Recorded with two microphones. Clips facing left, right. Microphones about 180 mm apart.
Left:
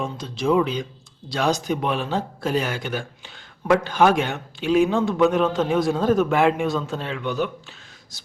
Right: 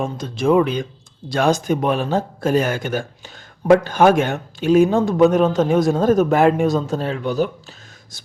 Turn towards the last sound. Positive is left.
turn(degrees=-40)  # may be behind; listen again after turning